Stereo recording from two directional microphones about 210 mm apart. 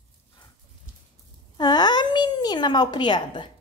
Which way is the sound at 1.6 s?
20° left (ahead or behind).